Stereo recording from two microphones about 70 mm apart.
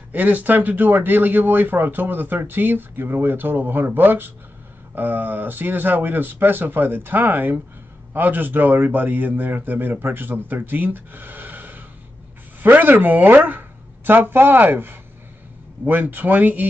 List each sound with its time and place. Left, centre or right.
0.1 s speech: right